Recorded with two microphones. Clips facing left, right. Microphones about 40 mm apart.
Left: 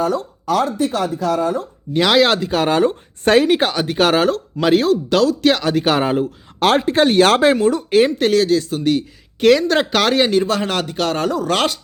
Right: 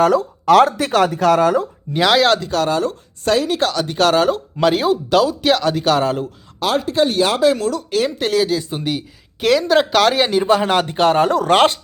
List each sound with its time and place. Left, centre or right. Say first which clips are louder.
0.0 s speech: right 5 dB; right
1.9 s speech: even; centre
2.6 s speech: left 3 dB; left
3.5 s speech: left 2 dB; left
4.6 s speech: left 1 dB; centre
5.8 s speech: even; centre
6.6 s speech: left 4 dB; left
7.5 s speech: left 5 dB; left
8.2 s speech: left 3 dB; centre
10.5 s speech: right 5 dB; centre